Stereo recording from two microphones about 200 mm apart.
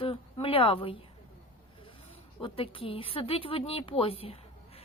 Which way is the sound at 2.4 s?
25° left (ahead or behind).